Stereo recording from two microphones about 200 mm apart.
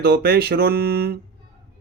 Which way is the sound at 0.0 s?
50° right (ahead or behind).